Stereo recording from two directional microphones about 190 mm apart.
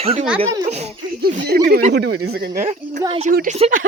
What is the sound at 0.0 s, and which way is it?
Speech, 30° right (ahead or behind).